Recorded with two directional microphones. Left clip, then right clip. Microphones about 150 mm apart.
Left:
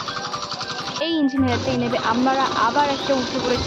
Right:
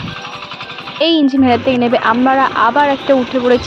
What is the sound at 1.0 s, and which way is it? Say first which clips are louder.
Speech: right 10 dB; 45° right (ahead or behind).